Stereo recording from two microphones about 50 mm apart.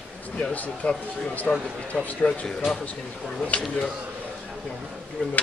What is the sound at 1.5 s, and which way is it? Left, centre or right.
Speech, centre.